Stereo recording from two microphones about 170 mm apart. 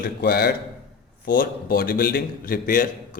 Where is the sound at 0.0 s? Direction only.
65° left (ahead or behind).